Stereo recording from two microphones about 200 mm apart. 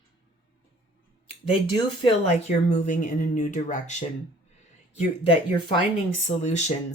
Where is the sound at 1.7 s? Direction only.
25° left (ahead or behind).